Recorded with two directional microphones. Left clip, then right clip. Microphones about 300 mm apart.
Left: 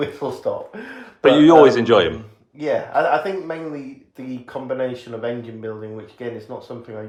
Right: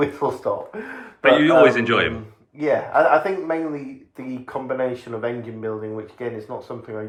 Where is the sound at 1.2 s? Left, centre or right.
Centre.